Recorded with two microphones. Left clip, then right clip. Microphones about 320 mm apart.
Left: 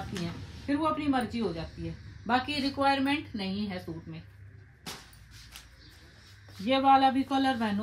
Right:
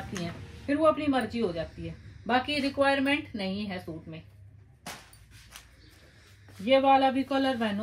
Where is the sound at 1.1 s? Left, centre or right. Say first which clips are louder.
Right 2 dB; centre.